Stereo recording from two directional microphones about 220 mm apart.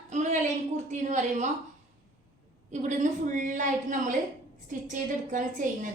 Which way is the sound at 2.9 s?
35° right (ahead or behind).